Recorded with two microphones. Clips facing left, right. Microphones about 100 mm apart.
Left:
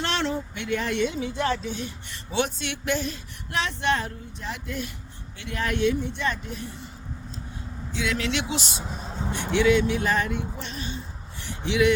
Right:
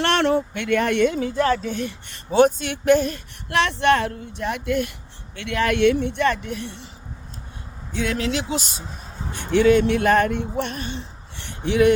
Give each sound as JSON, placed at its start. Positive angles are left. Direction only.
{"t": 0.0, "sound": "speech", "side_deg": -60}
{"t": 7.9, "sound": "speech", "side_deg": -45}
{"t": 8.8, "sound": "vehicle", "side_deg": 15}
{"t": 9.5, "sound": "speech", "side_deg": -50}